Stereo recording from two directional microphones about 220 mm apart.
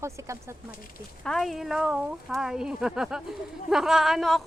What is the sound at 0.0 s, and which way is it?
Speech, 10° right (ahead or behind).